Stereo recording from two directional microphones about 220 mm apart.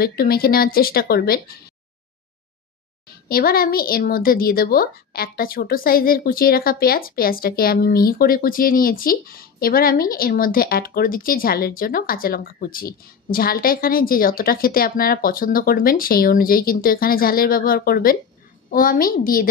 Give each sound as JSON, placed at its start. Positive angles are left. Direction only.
{"t": 0.0, "sound": "a woman's voice", "side_deg": 45}
{"t": 3.1, "sound": "a child's voice", "side_deg": 45}